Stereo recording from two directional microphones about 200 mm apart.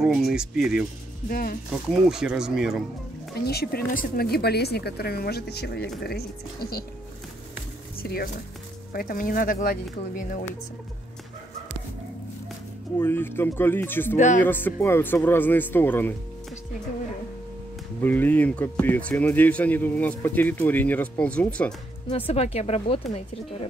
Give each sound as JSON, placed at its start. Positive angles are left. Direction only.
{"t": 0.1, "sound": "speech", "side_deg": -5}
{"t": 1.3, "sound": "speech", "side_deg": 45}
{"t": 1.7, "sound": "speech", "side_deg": 0}
{"t": 3.3, "sound": "speech", "side_deg": 55}
{"t": 8.0, "sound": "speech", "side_deg": 50}
{"t": 12.9, "sound": "speech", "side_deg": 10}
{"t": 14.1, "sound": "speech", "side_deg": 35}
{"t": 14.4, "sound": "speech", "side_deg": 10}
{"t": 18.0, "sound": "speech", "side_deg": 10}
{"t": 22.1, "sound": "speech", "side_deg": 30}